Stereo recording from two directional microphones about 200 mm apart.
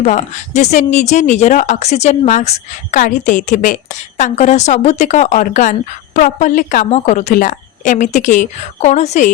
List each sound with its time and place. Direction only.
0.0 s speech: 35° left (ahead or behind)